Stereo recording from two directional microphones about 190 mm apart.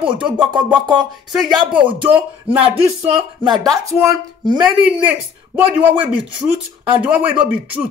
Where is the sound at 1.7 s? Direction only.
10° right (ahead or behind).